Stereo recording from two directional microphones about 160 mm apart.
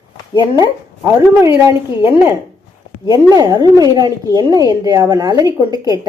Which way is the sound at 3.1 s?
25° right (ahead or behind).